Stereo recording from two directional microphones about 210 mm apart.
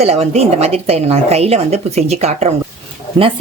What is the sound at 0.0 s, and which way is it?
Speech, 30° right (ahead or behind).